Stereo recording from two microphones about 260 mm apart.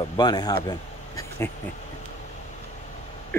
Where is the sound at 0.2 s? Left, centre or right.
Centre.